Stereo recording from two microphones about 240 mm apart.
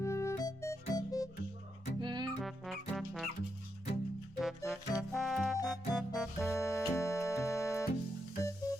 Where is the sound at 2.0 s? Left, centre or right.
Centre.